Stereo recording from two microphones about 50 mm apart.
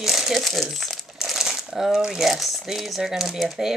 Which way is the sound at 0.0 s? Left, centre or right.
Centre.